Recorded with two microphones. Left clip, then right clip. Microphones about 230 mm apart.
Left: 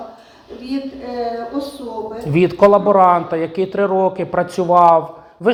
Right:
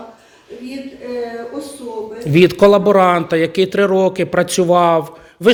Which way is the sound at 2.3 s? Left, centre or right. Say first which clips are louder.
Right 2 dB; right.